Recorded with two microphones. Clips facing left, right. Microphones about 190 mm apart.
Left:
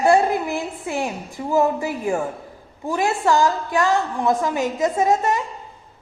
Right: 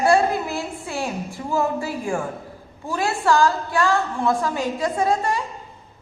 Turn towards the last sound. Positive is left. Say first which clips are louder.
# left 2 dB
turn(degrees=20)  # may be behind; listen again after turning